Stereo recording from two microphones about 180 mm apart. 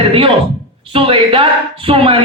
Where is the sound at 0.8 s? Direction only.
30° right (ahead or behind).